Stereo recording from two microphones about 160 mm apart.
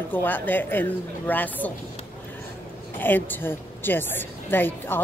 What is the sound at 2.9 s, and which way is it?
A woman's voice, 10° left (ahead or behind).